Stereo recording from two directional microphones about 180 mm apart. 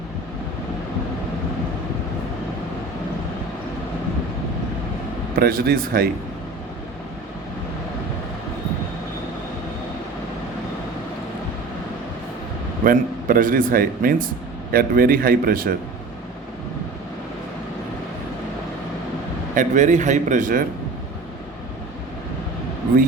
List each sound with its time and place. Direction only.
5.4 s speech: 55° right (ahead or behind)
12.8 s a man's voice: 50° right (ahead or behind)
19.5 s a man's voice: 40° right (ahead or behind)